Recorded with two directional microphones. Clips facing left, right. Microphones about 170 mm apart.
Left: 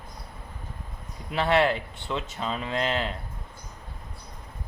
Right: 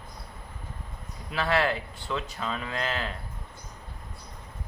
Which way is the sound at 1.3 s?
25° left (ahead or behind).